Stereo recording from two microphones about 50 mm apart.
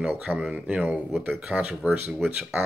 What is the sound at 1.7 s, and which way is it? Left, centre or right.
Speech, centre.